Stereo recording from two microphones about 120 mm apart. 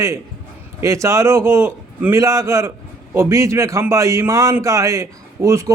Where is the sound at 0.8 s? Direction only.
25° right (ahead or behind).